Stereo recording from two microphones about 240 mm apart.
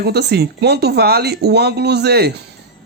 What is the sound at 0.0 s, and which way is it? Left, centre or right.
Speech, right.